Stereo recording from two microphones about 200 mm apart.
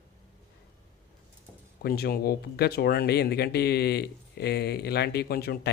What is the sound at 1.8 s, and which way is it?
Speech, 50° left (ahead or behind).